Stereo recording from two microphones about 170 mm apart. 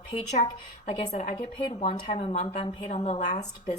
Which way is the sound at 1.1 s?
40° left (ahead or behind).